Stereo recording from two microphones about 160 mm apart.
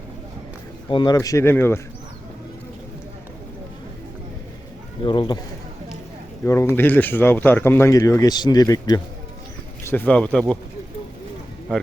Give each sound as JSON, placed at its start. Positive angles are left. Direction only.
{"t": 0.9, "sound": "speech", "side_deg": 30}
{"t": 5.0, "sound": "speech", "side_deg": 30}
{"t": 6.4, "sound": "speech", "side_deg": 15}
{"t": 9.8, "sound": "speech", "side_deg": 10}